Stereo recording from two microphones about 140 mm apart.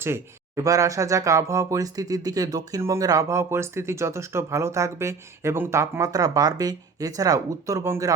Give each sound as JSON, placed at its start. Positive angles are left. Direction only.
{"t": 0.0, "sound": "speech", "side_deg": -20}